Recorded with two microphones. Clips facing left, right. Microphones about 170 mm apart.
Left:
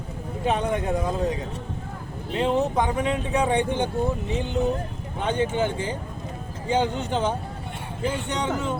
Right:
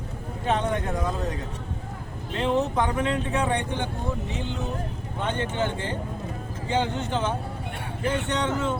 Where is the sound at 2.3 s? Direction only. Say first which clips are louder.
Left 2 dB; 15° left (ahead or behind).